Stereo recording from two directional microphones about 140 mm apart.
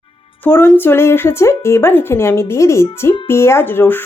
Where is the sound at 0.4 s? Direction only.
15° left (ahead or behind).